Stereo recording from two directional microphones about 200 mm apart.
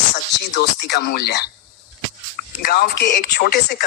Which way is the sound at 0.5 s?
60° left (ahead or behind).